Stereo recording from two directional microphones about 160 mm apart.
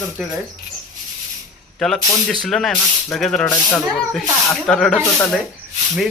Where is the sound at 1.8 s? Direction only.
Centre (ahead or behind).